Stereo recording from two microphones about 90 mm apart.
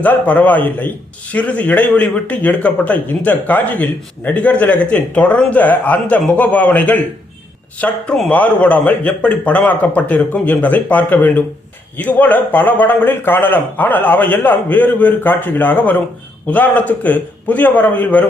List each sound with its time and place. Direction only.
0.0 s a man's voice: 15° left (ahead or behind)